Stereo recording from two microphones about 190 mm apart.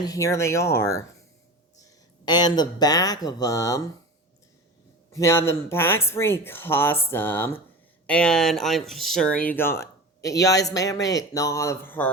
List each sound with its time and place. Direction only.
0.0 s speech: 15° left (ahead or behind)
5.1 s speech: 15° left (ahead or behind)